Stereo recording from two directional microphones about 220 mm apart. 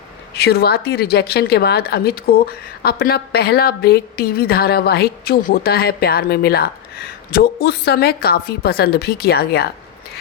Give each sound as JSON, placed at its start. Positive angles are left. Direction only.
{"t": 0.4, "sound": "a woman's voice", "side_deg": 45}